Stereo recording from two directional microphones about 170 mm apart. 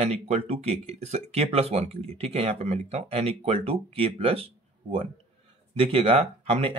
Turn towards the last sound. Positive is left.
turn(degrees=-35)  # may be behind; listen again after turning